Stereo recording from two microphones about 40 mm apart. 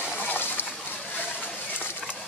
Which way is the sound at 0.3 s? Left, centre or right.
Left.